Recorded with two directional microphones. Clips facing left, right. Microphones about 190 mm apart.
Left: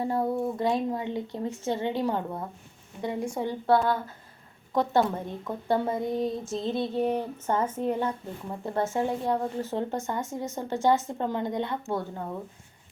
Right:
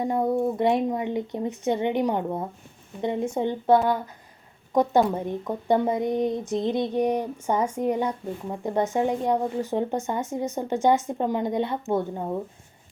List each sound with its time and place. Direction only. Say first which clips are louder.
0.0 s speech: right 4 dB; 20° right (ahead or behind)